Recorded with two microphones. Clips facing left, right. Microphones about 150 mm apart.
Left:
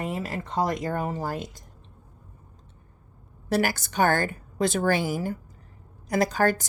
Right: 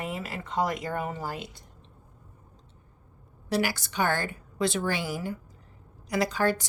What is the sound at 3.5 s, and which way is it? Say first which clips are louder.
A woman's voice: left 3 dB; 45° left (ahead or behind).